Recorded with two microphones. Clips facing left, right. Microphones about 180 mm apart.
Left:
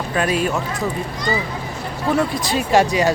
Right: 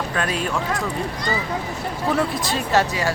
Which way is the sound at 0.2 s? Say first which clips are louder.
Left 6 dB; 10° left (ahead or behind).